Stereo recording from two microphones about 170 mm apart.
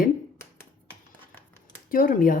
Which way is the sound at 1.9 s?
55° left (ahead or behind).